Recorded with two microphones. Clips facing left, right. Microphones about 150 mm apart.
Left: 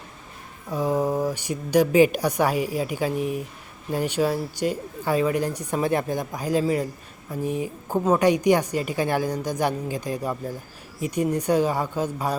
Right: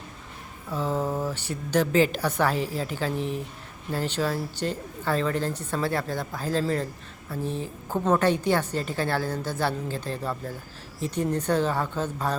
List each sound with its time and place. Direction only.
0.7 s a woman's voice: 15° left (ahead or behind)